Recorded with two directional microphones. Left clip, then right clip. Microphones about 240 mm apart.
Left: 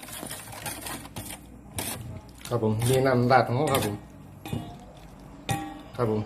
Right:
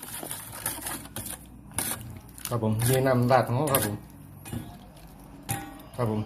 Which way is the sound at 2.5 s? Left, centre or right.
Right.